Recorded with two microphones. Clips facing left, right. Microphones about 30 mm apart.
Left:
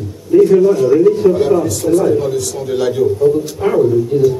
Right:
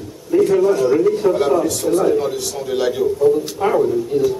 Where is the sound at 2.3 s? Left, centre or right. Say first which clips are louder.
Left 5 dB; right.